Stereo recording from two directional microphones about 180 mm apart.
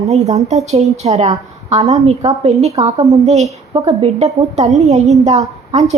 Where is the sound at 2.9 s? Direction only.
20° right (ahead or behind).